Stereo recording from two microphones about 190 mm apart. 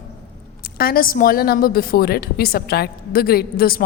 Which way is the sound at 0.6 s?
50° left (ahead or behind).